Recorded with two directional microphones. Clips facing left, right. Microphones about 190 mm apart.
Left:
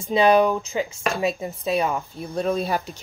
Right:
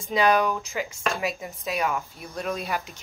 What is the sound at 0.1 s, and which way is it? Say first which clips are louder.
Speech: left 5 dB; 25° left (ahead or behind).